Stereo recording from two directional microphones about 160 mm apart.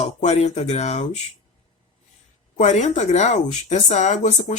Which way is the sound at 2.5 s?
50° left (ahead or behind).